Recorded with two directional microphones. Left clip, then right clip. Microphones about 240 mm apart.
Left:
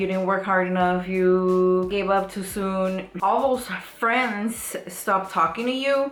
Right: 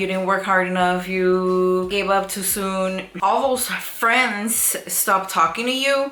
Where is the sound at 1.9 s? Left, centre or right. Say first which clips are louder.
Right 3 dB; centre.